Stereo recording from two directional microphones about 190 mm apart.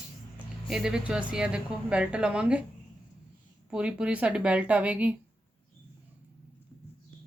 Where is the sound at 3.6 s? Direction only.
5° right (ahead or behind).